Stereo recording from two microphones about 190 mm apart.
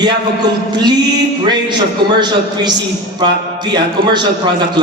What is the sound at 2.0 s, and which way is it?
Speech, 65° right (ahead or behind).